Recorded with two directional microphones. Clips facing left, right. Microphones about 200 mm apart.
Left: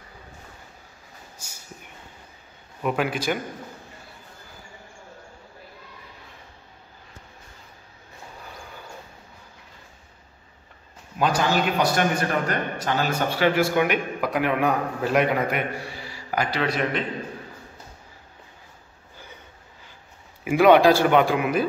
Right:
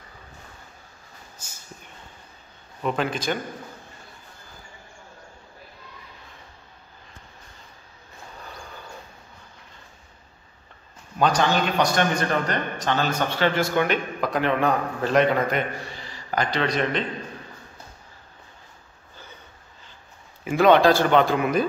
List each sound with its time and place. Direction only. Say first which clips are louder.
2.8 s a man's voice: left 1 dB; 10° left (ahead or behind)
11.1 s a man's voice: right 1 dB; 5° left (ahead or behind)
20.4 s a man's voice: left 1 dB; 10° left (ahead or behind)